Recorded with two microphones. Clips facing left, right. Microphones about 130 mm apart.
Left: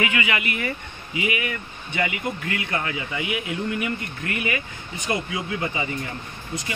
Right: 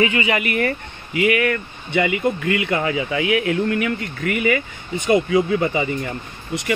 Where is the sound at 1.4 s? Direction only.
70° right (ahead or behind).